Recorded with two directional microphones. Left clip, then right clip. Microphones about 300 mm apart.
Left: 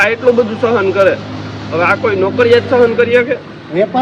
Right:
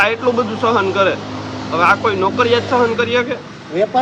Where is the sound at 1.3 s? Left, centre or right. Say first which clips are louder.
Even; right.